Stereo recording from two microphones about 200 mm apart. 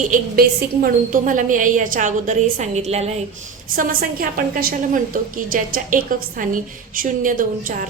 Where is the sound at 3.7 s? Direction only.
45° right (ahead or behind).